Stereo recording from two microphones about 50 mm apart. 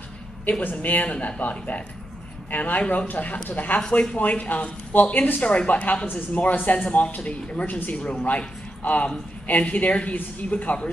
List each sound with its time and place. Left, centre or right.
0.5 s speech: left